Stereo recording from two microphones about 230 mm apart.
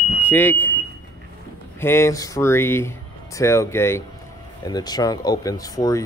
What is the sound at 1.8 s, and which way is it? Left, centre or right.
Speech, centre.